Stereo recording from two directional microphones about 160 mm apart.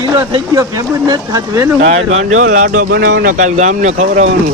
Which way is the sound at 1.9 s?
45° right (ahead or behind).